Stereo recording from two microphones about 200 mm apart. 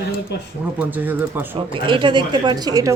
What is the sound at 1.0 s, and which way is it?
Speech, 10° right (ahead or behind).